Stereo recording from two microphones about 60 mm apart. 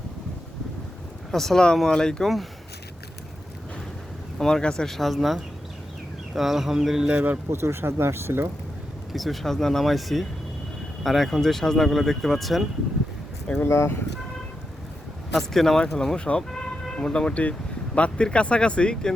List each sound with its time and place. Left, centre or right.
1.3 s speech: centre
4.4 s speech: centre
7.5 s speech: right
9.1 s speech: centre
13.7 s speech: left
15.3 s speech: centre
16.5 s vehicle: centre
17.9 s speech: centre